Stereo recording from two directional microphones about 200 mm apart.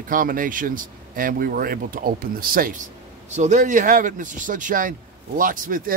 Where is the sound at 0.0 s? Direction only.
45° right (ahead or behind).